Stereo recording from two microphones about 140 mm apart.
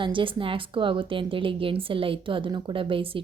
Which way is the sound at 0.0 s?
35° right (ahead or behind).